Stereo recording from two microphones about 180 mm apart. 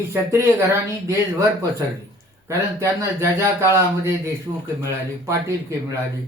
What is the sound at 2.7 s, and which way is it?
Speech, 15° right (ahead or behind).